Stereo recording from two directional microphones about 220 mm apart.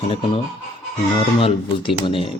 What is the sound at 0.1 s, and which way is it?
Speech, 25° left (ahead or behind).